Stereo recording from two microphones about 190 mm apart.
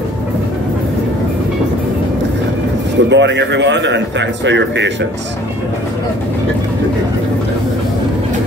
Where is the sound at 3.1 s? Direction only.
70° right (ahead or behind).